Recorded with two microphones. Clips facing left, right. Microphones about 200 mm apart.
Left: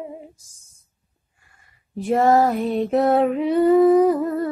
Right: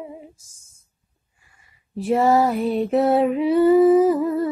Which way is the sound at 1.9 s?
Centre (ahead or behind).